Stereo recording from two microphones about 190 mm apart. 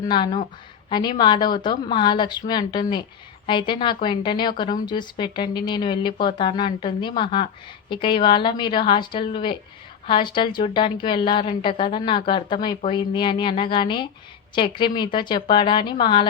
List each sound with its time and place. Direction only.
0.0 s a woman's voice: 20° left (ahead or behind)